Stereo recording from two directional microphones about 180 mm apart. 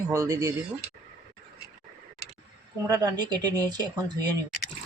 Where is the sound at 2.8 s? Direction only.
20° right (ahead or behind).